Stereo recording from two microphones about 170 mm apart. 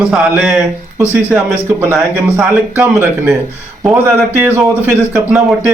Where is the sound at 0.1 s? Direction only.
5° right (ahead or behind).